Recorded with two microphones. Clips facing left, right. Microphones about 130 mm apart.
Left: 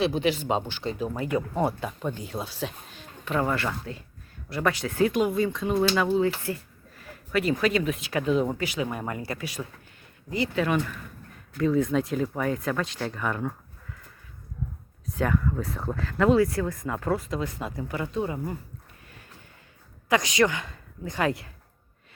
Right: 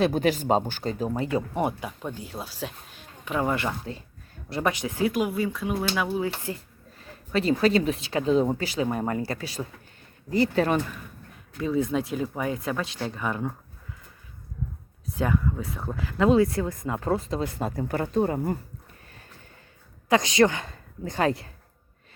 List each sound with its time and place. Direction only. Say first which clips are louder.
0.0 s speech: right 2 dB; 45° right (ahead or behind); by 1.9 s 15° right (ahead or behind)
2.0 s speech: left 3 dB; 5° right (ahead or behind)
6.4 s speech: left 2 dB; 20° right (ahead or behind); by 10.8 s 40° right (ahead or behind)
12.0 s speech: left 1 dB; 15° right (ahead or behind)
15.1 s speech: even; 20° right (ahead or behind)
15.4 s speech: left 1 dB; 10° right (ahead or behind)
15.7 s speech: left 2 dB; centre (ahead or behind)
16.0 s speech: right 1 dB; 15° right (ahead or behind); by 18.5 s 45° right (ahead or behind)
20.1 s a woman's voice: right 2 dB; 30° right (ahead or behind)